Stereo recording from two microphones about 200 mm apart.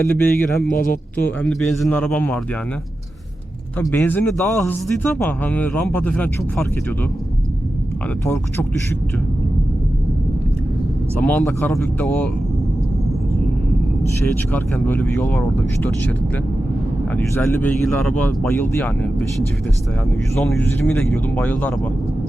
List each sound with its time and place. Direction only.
0.1 s a man's voice: 10° left (ahead or behind)
0.7 s speech: 45° left (ahead or behind)
1.1 s a man's voice: 10° left (ahead or behind)
3.8 s a man's voice: 10° left (ahead or behind)
8.2 s a man's voice: 15° left (ahead or behind)
11.2 s a man's voice: 5° left (ahead or behind)
14.5 s a man's voice: 10° left (ahead or behind)
20.3 s a man's voice: 10° left (ahead or behind)